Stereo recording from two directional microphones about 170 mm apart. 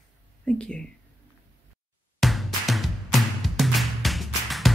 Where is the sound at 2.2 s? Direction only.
Centre (ahead or behind).